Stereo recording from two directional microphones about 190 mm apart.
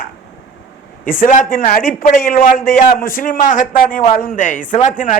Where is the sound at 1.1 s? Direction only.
45° left (ahead or behind).